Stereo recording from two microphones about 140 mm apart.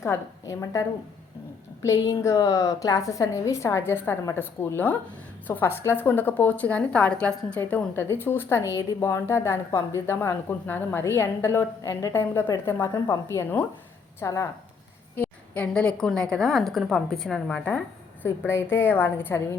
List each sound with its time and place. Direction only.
0.0 s a woman's voice: 20° left (ahead or behind)
1.9 s a woman's voice: 20° left (ahead or behind)